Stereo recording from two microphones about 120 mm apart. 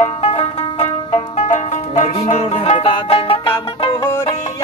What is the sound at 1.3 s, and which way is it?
Music, 75° left (ahead or behind).